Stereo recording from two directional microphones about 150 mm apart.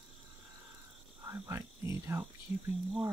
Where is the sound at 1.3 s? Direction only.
20° right (ahead or behind).